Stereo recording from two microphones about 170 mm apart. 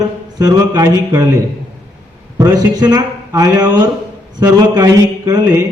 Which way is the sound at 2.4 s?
20° right (ahead or behind).